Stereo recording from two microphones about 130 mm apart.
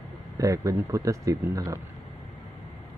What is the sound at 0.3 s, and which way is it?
A man's voice, 25° right (ahead or behind).